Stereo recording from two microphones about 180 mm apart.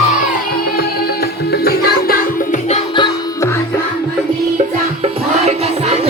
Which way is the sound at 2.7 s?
25° left (ahead or behind).